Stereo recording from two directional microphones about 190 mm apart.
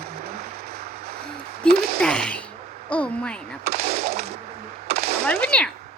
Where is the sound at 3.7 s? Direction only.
35° right (ahead or behind).